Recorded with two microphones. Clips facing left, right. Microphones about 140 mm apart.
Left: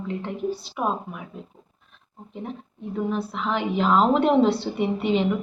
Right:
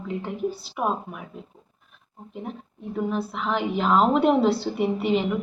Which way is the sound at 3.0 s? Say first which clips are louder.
Even; centre (ahead or behind).